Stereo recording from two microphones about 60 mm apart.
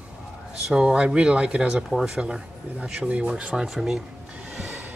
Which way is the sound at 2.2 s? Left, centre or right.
Centre.